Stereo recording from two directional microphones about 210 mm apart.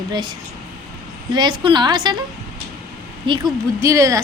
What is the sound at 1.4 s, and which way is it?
Speech, 20° right (ahead or behind).